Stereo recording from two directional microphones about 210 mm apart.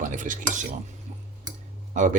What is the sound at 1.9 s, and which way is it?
Speech, 35° right (ahead or behind).